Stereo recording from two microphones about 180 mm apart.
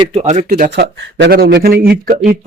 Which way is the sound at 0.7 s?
60° right (ahead or behind).